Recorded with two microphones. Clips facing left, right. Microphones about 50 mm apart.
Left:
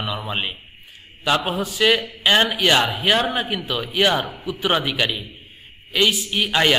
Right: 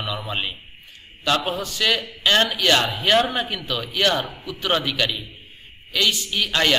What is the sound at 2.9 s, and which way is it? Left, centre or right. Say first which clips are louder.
A man's voice: even; centre.